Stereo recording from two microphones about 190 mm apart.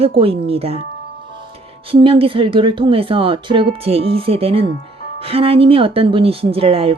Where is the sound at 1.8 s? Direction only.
30° right (ahead or behind).